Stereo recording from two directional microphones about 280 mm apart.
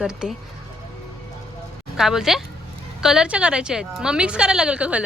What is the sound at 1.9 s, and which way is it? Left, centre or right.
A woman's voice, centre.